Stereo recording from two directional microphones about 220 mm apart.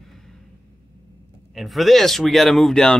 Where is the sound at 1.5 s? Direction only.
Centre (ahead or behind).